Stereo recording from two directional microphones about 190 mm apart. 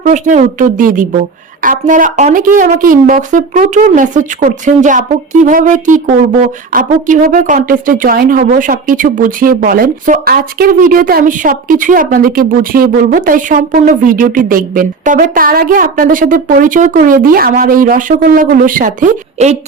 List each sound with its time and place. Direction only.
0.0 s speech: 40° right (ahead or behind)